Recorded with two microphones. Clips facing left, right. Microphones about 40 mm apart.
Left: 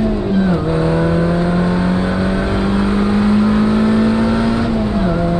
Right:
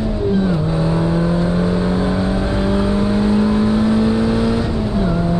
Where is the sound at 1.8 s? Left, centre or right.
Left.